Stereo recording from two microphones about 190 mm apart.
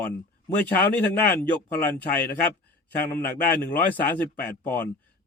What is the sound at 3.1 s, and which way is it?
Speech, 50° left (ahead or behind).